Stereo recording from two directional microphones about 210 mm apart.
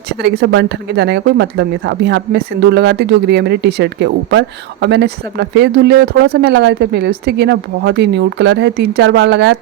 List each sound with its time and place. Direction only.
0.1 s speech: 50° right (ahead or behind)